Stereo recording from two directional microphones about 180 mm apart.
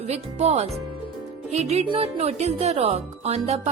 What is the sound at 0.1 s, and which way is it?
A woman's voice, 40° right (ahead or behind).